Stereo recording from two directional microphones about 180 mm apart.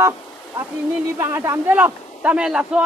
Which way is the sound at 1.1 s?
15° right (ahead or behind).